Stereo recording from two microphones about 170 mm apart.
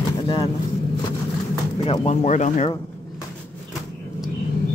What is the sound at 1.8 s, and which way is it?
Speech, 35° left (ahead or behind).